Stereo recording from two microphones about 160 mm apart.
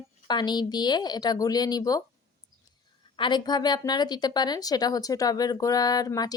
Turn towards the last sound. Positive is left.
turn(degrees=25)  # may be behind; listen again after turning